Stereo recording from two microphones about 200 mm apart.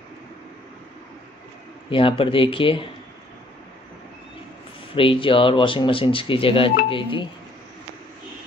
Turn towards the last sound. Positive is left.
turn(degrees=25)  # may be behind; listen again after turning